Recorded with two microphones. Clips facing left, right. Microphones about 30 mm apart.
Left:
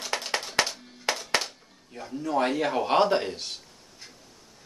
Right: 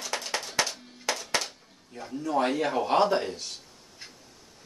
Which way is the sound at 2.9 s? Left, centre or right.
Left.